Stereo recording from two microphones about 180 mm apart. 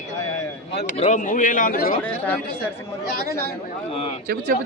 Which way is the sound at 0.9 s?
40° left (ahead or behind).